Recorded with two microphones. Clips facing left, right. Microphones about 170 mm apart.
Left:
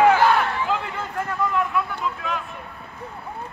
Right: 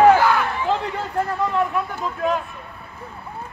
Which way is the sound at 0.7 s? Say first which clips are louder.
Right 3 dB; 35° right (ahead or behind).